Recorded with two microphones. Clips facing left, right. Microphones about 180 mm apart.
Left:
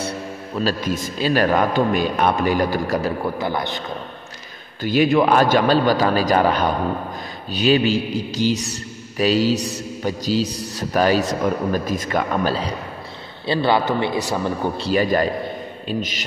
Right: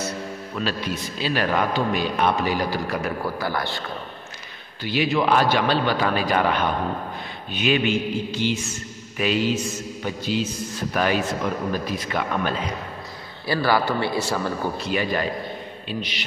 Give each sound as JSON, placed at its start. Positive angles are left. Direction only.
{"t": 0.6, "sound": "a man's voice", "side_deg": 45}
{"t": 3.0, "sound": "a man's voice", "side_deg": 20}
{"t": 4.8, "sound": "a man's voice", "side_deg": 50}
{"t": 13.5, "sound": "a man's voice", "side_deg": 25}
{"t": 14.8, "sound": "a man's voice", "side_deg": 40}